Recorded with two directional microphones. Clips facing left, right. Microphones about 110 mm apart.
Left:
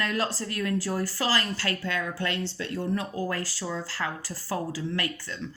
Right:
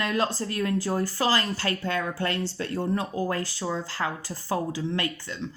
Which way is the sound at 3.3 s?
25° right (ahead or behind).